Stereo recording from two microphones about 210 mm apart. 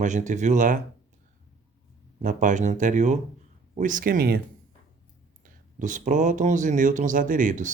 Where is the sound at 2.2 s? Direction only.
40° right (ahead or behind).